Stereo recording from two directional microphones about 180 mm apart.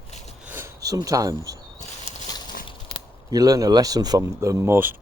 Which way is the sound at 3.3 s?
20° right (ahead or behind).